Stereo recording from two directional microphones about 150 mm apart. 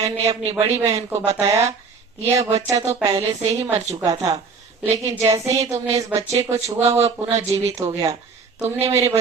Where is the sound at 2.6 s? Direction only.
20° right (ahead or behind).